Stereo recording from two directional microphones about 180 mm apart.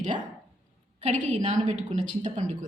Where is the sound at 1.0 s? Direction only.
40° right (ahead or behind).